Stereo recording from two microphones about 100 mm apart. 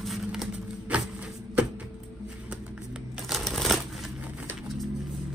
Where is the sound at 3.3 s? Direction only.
Centre (ahead or behind).